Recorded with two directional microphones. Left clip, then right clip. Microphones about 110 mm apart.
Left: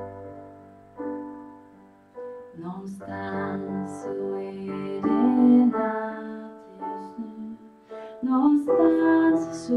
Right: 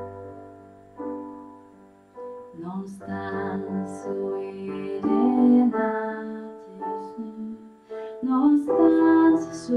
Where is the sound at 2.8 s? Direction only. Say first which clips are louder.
Even; 20° left (ahead or behind).